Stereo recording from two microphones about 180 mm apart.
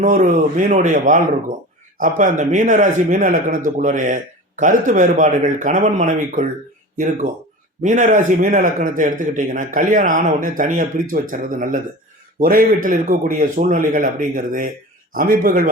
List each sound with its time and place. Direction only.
0.0 s speech: 45° right (ahead or behind)